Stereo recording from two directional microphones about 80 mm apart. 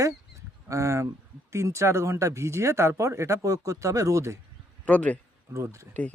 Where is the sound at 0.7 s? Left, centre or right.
Right.